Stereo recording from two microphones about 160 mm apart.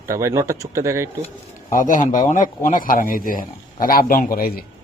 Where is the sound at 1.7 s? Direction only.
55° left (ahead or behind).